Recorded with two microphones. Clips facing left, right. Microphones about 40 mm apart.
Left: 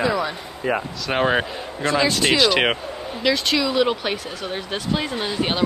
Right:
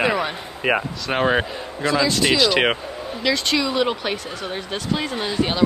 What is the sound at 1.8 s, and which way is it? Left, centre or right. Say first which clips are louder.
Speech: even; left.